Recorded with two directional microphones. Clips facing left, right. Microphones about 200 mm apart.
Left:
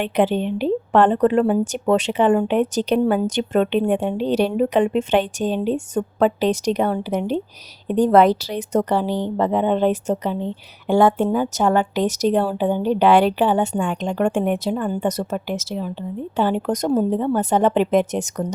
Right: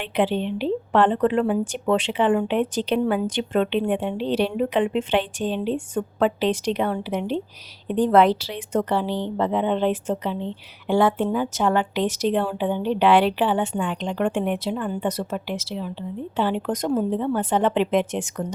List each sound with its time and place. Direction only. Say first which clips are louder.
0.0 s a woman's voice: left 4 dB; 45° left (ahead or behind)